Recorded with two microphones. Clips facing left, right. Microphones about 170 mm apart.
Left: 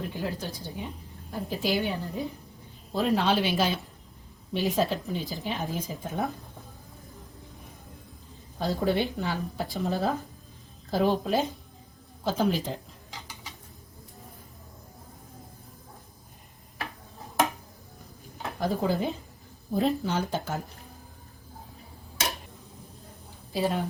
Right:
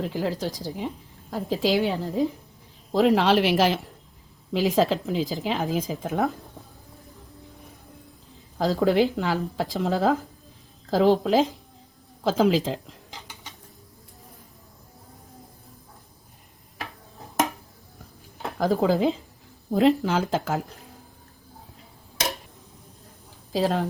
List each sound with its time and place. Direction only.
0.0 s speech: 85° right
8.5 s speech: 90° right
18.6 s speech: 90° right
23.5 s a woman's voice: 90° right